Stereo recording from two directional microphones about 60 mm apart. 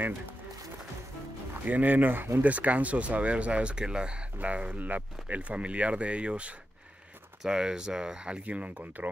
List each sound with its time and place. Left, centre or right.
1.6 s speech: right